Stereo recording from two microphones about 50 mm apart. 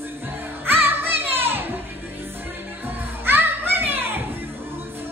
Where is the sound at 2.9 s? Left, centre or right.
Right.